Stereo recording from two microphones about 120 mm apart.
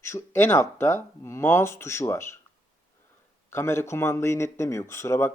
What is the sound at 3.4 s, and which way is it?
Speech, 20° left (ahead or behind).